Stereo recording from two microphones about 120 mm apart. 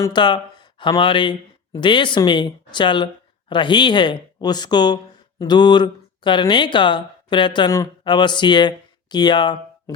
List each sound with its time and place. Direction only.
0.1 s speech: 40° left (ahead or behind)